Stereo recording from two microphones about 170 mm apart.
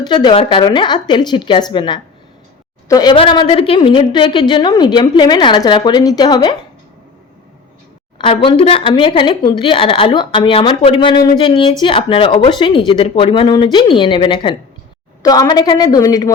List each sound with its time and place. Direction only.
0.0 s a woman's voice: 25° left (ahead or behind)
8.2 s a woman's voice: 30° left (ahead or behind)